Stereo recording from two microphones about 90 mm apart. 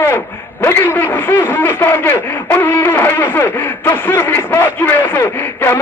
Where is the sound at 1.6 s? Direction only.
20° left (ahead or behind).